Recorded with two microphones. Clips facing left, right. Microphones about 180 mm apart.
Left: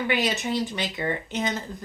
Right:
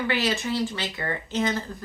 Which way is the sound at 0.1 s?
20° left (ahead or behind).